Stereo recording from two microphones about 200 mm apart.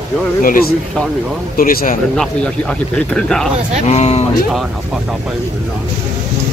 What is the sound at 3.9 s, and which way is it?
Speech, 30° left (ahead or behind).